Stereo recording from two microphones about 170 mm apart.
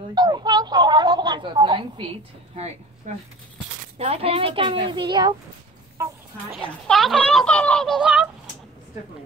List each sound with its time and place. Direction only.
0.1 s a woman's voice: 25° right (ahead or behind)
6.9 s speech: centre (ahead or behind)